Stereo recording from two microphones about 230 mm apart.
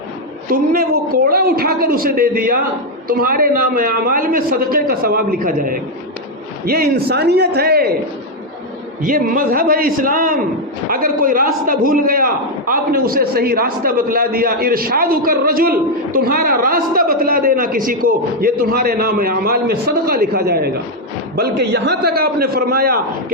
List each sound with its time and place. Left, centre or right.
0.5 s a man's voice: right
9.0 s a man's voice: right